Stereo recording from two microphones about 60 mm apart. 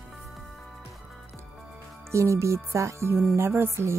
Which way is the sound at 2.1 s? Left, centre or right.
Right.